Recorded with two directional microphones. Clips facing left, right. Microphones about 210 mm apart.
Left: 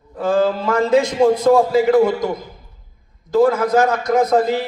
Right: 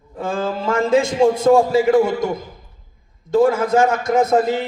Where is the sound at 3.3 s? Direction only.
25° right (ahead or behind).